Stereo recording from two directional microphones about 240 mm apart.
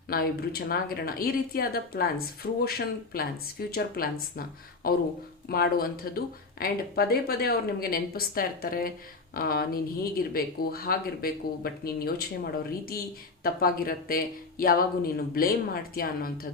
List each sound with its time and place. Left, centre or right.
0.1 s speech: left
13.4 s speech: left